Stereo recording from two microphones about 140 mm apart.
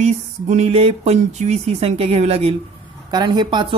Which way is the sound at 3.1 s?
30° right (ahead or behind).